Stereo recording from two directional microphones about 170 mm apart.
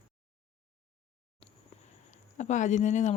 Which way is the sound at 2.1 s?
45° left (ahead or behind).